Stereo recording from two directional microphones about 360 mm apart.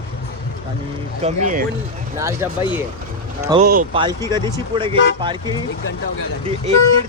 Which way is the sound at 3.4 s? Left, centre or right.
Centre.